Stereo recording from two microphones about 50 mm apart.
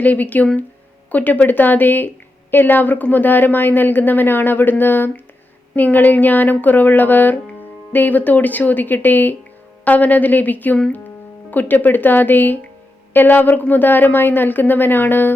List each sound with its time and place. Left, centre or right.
0.0 s a woman's voice: left